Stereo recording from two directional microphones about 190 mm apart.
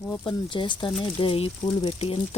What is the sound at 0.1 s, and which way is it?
Speech, 25° left (ahead or behind).